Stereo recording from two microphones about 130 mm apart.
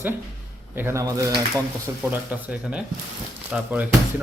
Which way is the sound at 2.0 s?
10° right (ahead or behind).